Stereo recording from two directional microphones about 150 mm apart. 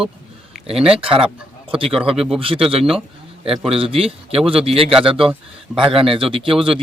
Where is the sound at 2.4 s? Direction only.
35° right (ahead or behind).